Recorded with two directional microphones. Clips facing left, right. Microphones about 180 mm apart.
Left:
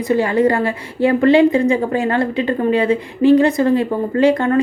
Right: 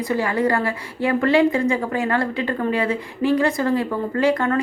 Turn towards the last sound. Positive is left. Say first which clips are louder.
# left 5 dB
turn(degrees=25)  # may be behind; listen again after turning